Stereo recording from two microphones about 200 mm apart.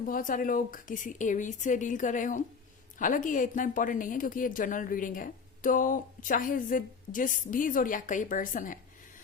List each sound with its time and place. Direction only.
0.0 s a woman's voice: 45° left (ahead or behind)